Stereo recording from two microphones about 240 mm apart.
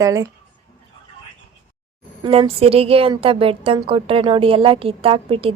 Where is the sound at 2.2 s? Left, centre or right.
Right.